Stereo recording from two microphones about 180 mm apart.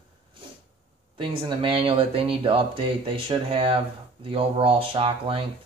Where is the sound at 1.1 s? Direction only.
30° right (ahead or behind).